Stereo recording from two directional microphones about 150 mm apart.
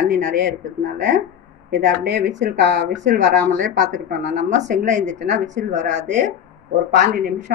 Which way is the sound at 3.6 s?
55° right (ahead or behind).